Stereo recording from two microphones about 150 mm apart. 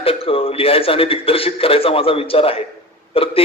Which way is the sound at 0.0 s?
40° left (ahead or behind).